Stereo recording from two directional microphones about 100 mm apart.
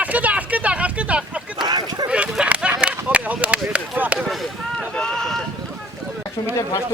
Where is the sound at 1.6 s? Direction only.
45° right (ahead or behind).